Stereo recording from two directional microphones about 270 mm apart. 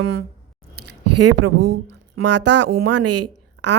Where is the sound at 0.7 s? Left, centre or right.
Right.